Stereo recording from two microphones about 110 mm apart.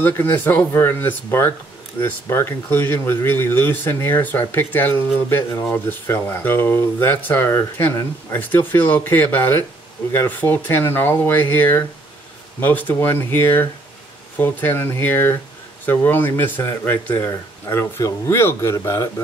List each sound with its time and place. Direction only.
0.0 s speech: 15° left (ahead or behind)